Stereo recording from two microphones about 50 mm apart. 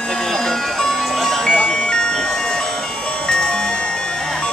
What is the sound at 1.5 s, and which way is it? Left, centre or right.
Music, left.